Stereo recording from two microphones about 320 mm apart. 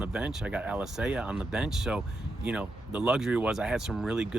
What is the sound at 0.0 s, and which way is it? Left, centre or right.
Speech, centre.